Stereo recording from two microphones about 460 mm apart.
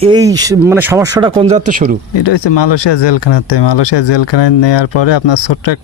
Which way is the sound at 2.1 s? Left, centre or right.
Left.